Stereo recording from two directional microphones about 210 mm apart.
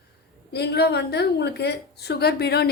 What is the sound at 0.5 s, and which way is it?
A woman's voice, 50° left (ahead or behind).